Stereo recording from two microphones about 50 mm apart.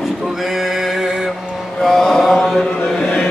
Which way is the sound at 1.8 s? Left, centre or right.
Centre.